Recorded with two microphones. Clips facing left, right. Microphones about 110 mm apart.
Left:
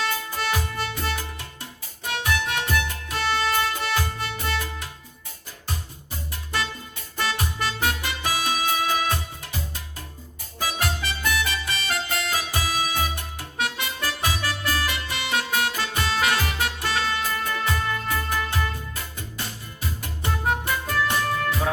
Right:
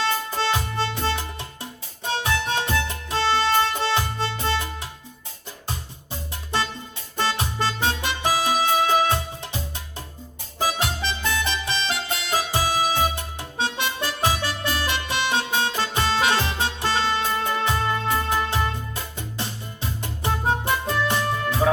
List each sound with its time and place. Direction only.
0.0 s music: 25° right (ahead or behind)
10.6 s music: 25° right (ahead or behind)